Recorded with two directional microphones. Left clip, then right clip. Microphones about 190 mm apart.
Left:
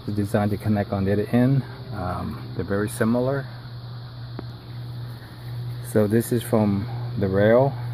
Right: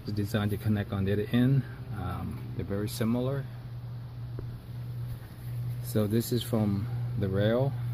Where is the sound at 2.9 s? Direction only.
25° left (ahead or behind).